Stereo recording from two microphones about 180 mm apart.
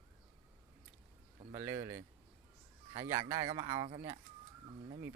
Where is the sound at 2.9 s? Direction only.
15° right (ahead or behind).